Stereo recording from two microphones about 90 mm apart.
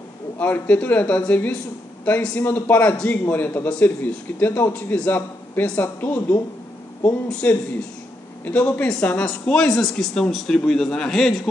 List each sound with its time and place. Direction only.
0.4 s a man's voice: 15° left (ahead or behind)
7.2 s speech: 10° left (ahead or behind)